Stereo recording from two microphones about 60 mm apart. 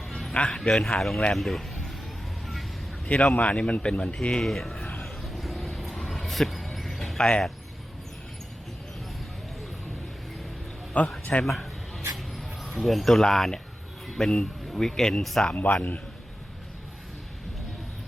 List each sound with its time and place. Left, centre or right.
0.1 s music: centre
0.3 s speech: centre
3.3 s speech: left
4.4 s speech: centre
5.0 s a sound: centre
7.2 s speech: centre
11.0 s speech: left
11.4 s a sound: centre
14.1 s speech: centre
15.5 s speech: left